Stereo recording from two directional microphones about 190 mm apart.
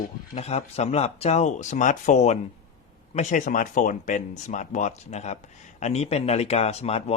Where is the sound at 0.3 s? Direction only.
35° left (ahead or behind).